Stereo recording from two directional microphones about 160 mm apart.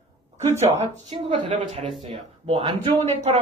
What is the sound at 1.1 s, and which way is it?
A woman's voice, 50° right (ahead or behind).